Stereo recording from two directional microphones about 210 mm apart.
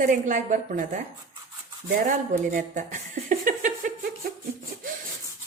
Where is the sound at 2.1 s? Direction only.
35° right (ahead or behind).